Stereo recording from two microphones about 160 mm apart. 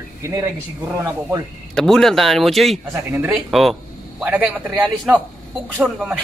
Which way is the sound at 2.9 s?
15° right (ahead or behind).